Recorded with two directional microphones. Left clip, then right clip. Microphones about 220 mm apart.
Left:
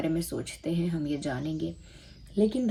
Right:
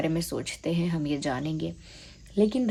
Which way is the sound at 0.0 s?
30° right (ahead or behind).